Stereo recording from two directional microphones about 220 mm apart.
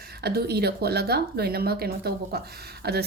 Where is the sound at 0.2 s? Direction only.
45° right (ahead or behind).